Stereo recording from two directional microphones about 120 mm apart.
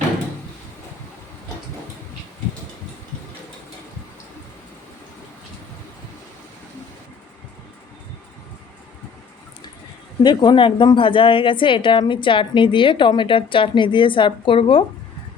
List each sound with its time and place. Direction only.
10.2 s a woman's voice: 40° left (ahead or behind)